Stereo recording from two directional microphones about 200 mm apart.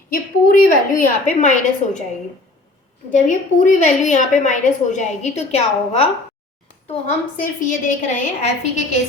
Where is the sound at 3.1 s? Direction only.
40° left (ahead or behind).